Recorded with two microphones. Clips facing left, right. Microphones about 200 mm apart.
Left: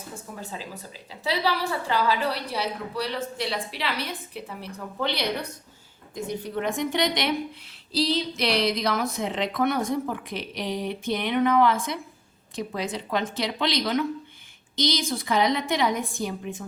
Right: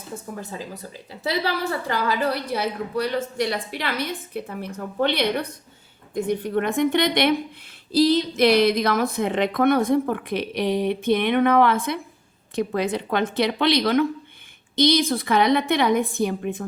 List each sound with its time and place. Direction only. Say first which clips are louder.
1.5 s a woman's voice: right 1 dB; 50° right (ahead or behind)